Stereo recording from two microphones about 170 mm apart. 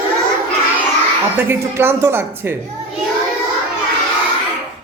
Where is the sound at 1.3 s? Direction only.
15° right (ahead or behind).